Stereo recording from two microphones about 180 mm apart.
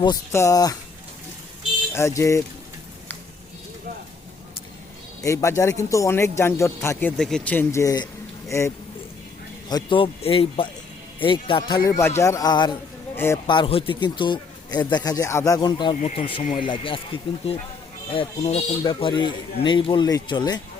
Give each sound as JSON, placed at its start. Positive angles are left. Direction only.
{"t": 0.0, "sound": "speech", "side_deg": 20}
{"t": 1.9, "sound": "a man's voice", "side_deg": 15}
{"t": 5.2, "sound": "a man's voice", "side_deg": 15}
{"t": 7.2, "sound": "a man's voice", "side_deg": 5}
{"t": 11.9, "sound": "a man's voice", "side_deg": 15}
{"t": 13.5, "sound": "speech", "side_deg": 30}
{"t": 16.0, "sound": "speech", "side_deg": 35}